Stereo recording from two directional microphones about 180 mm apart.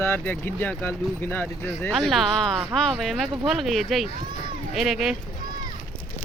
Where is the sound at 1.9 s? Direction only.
Centre (ahead or behind).